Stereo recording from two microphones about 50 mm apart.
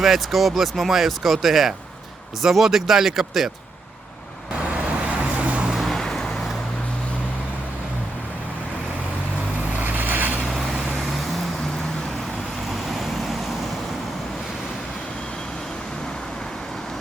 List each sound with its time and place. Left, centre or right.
0.0 s speech: centre
4.6 s vehicle: right
5.8 s vehicle: centre
9.8 s boat: right